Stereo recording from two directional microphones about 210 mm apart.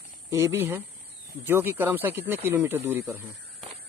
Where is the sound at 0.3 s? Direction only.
10° right (ahead or behind).